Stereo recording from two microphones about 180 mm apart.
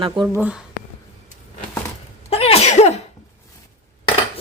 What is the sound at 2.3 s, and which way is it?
Sneeze, 35° left (ahead or behind).